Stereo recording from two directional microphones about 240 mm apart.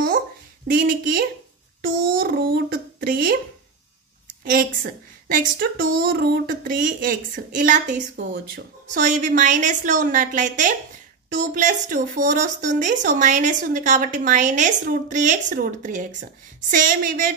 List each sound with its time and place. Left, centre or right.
0.8 s a woman's voice: right
4.6 s a woman's voice: right